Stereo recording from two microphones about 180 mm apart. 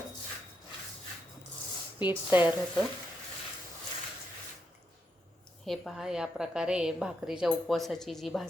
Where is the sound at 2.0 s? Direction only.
25° left (ahead or behind).